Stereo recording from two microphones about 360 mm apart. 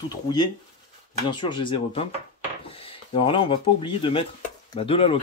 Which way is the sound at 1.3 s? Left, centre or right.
Centre.